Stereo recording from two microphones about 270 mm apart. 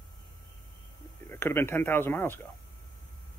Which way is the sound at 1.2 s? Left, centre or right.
Centre.